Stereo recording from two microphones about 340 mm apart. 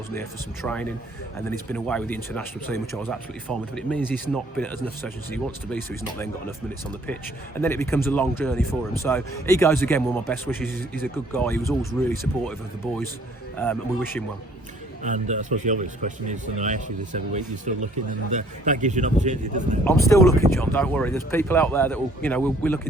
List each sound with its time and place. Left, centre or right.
0.1 s a man's voice: centre
7.6 s a man's voice: centre
13.6 s speech: centre
15.0 s speech: right
19.8 s speech: centre